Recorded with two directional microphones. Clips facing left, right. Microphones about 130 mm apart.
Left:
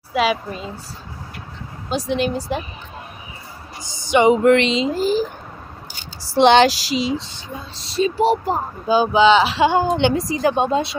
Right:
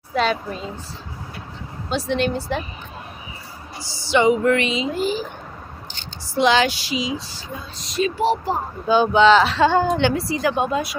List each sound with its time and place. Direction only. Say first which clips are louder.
0.1 s a woman's voice: left 2 dB; 5° left (ahead or behind)
1.9 s speech: left 1 dB; 10° left (ahead or behind)
4.1 s a woman's voice: left 3 dB; 20° left (ahead or behind)
4.5 s a sound: left 5 dB; 90° left
4.9 s speech: left 4 dB; 40° left (ahead or behind)
6.3 s speech: left 5 dB; 65° left (ahead or behind)
7.2 s a woman's voice: left 2 dB; 25° left (ahead or behind)
9.0 s speech: even; 5° left (ahead or behind)
9.6 s a woman's voice: left 1 dB; 15° left (ahead or behind)